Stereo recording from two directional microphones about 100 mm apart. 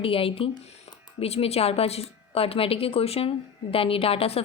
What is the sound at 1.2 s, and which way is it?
A woman's voice, 85° left.